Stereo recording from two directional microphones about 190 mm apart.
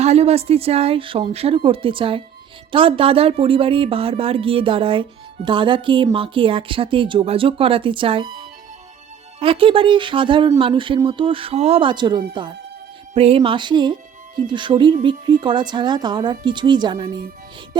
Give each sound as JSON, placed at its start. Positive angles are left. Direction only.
{"t": 0.0, "sound": "speech", "side_deg": -35}
{"t": 9.4, "sound": "speech", "side_deg": -30}